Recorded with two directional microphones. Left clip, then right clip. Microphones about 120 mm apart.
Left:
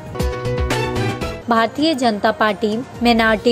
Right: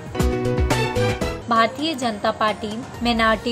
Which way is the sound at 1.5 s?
50° left (ahead or behind).